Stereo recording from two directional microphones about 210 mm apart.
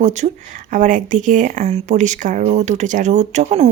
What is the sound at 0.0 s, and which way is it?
Speech, 35° right (ahead or behind).